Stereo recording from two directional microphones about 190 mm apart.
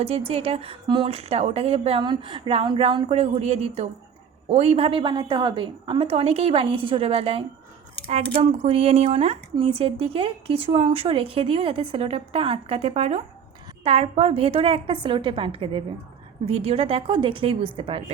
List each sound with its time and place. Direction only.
0.0 s a woman's voice: 30° right (ahead or behind)